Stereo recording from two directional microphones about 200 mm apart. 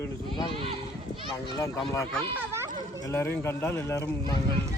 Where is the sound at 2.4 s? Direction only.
15° right (ahead or behind).